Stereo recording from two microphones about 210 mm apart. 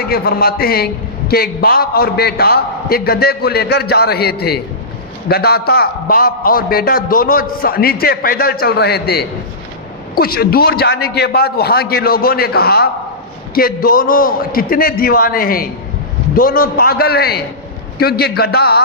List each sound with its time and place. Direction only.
0.0 s a man's voice: 45° left (ahead or behind)